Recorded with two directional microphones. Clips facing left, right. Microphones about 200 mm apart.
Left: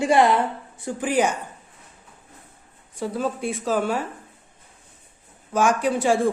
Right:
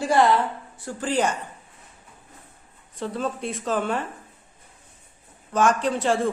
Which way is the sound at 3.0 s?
10° left (ahead or behind).